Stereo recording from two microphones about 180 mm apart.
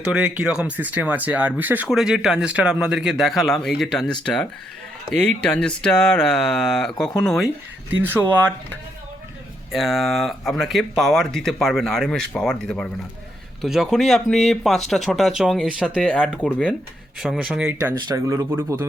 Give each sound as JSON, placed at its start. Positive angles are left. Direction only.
{"t": 0.0, "sound": "speech", "side_deg": -5}
{"t": 5.1, "sound": "speech", "side_deg": 5}
{"t": 9.7, "sound": "speech", "side_deg": 0}
{"t": 17.2, "sound": "speech", "side_deg": -5}
{"t": 18.1, "sound": "speech", "side_deg": -20}